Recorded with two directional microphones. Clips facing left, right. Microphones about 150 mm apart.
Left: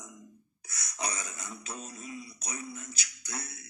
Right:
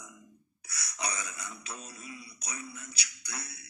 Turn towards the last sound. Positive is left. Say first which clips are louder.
# left 2 dB
turn(degrees=45)  # may be behind; listen again after turning